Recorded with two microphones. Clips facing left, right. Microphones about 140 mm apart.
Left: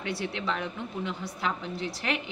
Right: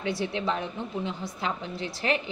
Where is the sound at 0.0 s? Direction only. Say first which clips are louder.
Right 3 dB; 30° right (ahead or behind).